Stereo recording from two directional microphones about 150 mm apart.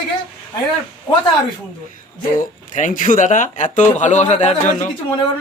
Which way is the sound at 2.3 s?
60° left (ahead or behind).